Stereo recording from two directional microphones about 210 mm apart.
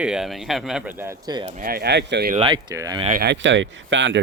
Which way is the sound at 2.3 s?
25° right (ahead or behind).